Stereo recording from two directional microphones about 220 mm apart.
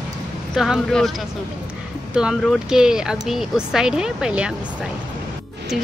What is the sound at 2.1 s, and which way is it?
Speech, 5° right (ahead or behind).